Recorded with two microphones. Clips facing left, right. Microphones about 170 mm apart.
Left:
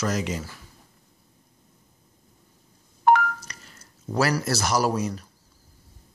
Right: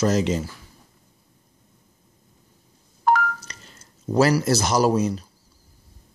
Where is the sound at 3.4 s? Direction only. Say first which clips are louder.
Right 1 dB; 25° right (ahead or behind).